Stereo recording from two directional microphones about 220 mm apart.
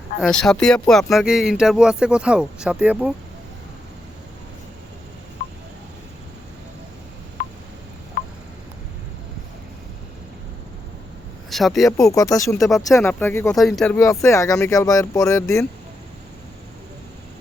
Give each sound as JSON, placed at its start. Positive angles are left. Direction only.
{"t": 0.2, "sound": "speech", "side_deg": 0}
{"t": 7.4, "sound": "telephone dialing", "side_deg": 40}
{"t": 11.5, "sound": "speech", "side_deg": 0}
{"t": 11.9, "sound": "speech", "side_deg": 15}
{"t": 12.5, "sound": "speech", "side_deg": 0}
{"t": 13.9, "sound": "speech", "side_deg": 15}